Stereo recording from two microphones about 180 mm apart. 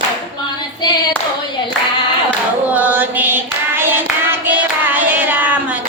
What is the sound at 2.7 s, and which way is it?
Clapping, 10° right (ahead or behind).